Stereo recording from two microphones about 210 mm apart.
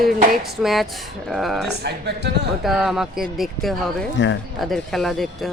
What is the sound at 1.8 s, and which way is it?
Speech, 50° right (ahead or behind).